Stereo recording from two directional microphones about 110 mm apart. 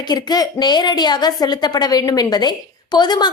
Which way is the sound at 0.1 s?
40° left (ahead or behind).